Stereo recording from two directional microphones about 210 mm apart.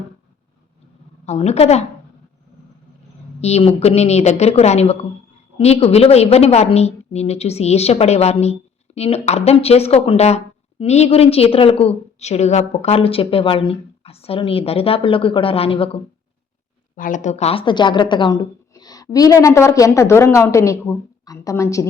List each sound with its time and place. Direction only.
1.2 s a woman's voice: 30° left (ahead or behind)
3.4 s a woman's voice: 30° left (ahead or behind)
16.9 s a woman's voice: 40° left (ahead or behind); by 21.8 s 15° left (ahead or behind)